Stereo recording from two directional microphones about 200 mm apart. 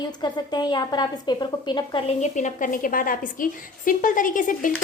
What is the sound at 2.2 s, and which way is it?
A woman's voice, 40° left (ahead or behind).